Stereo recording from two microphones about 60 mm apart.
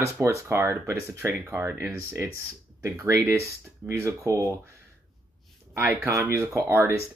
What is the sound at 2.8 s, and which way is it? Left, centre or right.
Speech, right.